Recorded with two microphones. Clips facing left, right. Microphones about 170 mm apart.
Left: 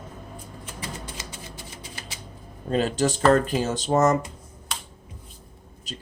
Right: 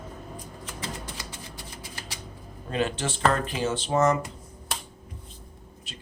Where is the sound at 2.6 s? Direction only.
40° left (ahead or behind).